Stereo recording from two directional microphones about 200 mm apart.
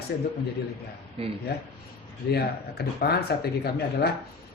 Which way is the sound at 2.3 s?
50° left (ahead or behind).